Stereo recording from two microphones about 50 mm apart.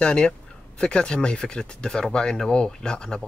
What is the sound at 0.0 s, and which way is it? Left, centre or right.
Speech, centre.